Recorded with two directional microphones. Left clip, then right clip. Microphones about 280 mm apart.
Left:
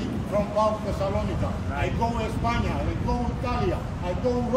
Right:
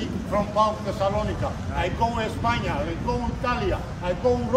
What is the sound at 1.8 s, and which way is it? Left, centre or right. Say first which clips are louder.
A man's voice: right 3 dB; centre.